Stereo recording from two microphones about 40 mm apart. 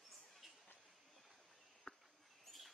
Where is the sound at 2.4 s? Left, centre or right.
Centre.